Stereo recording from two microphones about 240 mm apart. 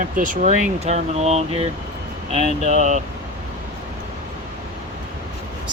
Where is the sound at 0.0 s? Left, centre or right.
Right.